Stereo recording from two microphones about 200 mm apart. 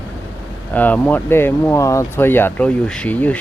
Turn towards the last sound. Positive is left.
turn(degrees=5)  # may be behind; listen again after turning